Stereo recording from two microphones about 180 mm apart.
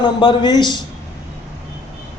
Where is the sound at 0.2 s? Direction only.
25° left (ahead or behind).